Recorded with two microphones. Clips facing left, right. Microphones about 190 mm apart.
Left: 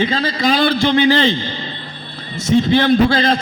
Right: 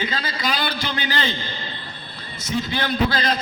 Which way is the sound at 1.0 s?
25° left (ahead or behind).